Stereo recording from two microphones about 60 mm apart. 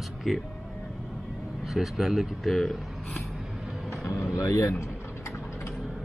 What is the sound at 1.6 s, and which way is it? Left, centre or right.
Speech, centre.